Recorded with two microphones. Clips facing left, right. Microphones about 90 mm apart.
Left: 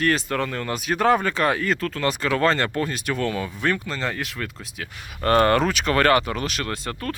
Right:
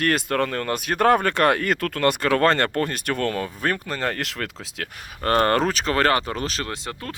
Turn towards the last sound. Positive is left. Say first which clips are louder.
# left 3 dB
turn(degrees=-20)  # may be behind; listen again after turning